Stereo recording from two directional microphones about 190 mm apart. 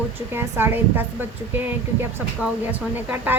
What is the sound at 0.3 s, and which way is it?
A woman's voice, 10° right (ahead or behind).